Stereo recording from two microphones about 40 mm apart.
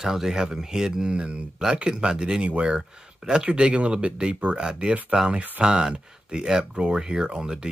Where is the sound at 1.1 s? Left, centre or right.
Right.